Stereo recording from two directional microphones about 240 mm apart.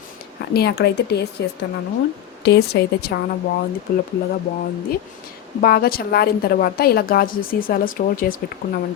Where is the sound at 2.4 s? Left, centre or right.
Left.